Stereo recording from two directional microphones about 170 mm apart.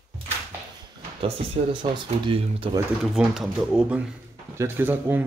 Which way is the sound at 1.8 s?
30° right (ahead or behind).